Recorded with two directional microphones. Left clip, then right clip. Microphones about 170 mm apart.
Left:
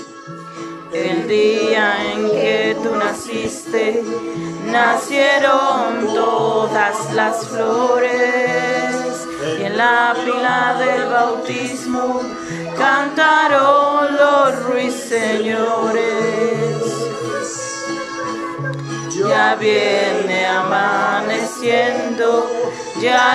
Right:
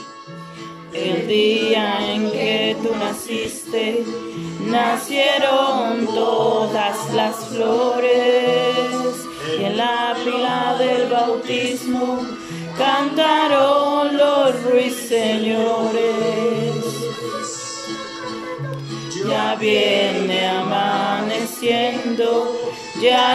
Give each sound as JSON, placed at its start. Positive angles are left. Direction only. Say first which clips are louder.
{"t": 0.9, "sound": "music", "louder": "left 2 dB", "side_deg": -10}
{"t": 12.7, "sound": "music", "louder": "left 2 dB", "side_deg": -15}
{"t": 19.2, "sound": "music", "louder": "left 5 dB", "side_deg": -10}